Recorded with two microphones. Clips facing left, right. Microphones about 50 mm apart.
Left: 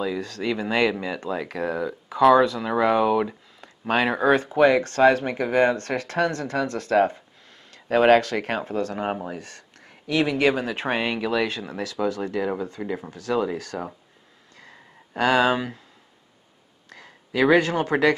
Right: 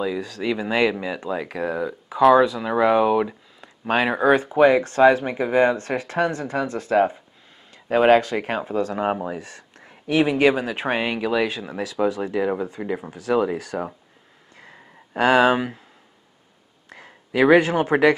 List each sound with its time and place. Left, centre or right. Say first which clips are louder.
0.0 s speech: right 2 dB; centre
14.5 s a sound: right 2 dB; centre
16.9 s speech: right 3 dB; centre